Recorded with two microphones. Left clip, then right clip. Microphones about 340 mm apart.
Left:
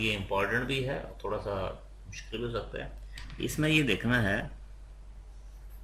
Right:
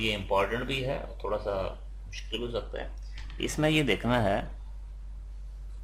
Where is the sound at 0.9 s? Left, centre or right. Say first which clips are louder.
Right 2 dB; centre.